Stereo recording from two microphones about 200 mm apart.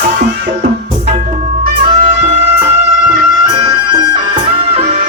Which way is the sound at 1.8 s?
30° right (ahead or behind).